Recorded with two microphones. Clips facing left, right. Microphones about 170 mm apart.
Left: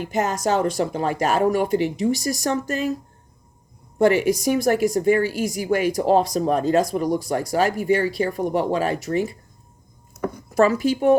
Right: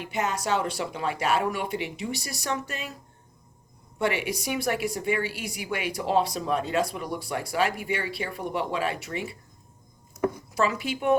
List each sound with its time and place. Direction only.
0.0 s speech: 45° left (ahead or behind)
3.9 s a woman's voice: 40° left (ahead or behind)
10.5 s a woman's voice: 45° left (ahead or behind)